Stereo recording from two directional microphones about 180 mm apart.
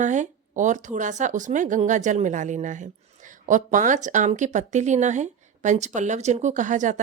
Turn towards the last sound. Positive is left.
turn(degrees=-45)  # may be behind; listen again after turning